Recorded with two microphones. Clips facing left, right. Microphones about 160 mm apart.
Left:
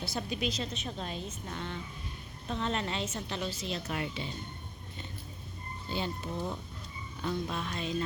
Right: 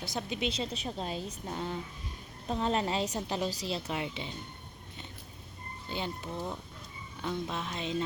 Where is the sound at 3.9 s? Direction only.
20° right (ahead or behind).